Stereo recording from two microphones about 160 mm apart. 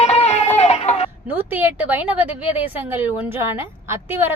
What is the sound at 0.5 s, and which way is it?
Chicken, 40° left (ahead or behind).